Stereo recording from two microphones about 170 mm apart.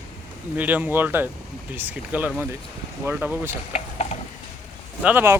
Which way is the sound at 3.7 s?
40° left (ahead or behind).